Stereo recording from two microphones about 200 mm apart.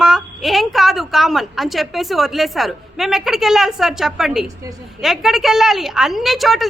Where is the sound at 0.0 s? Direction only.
Centre (ahead or behind).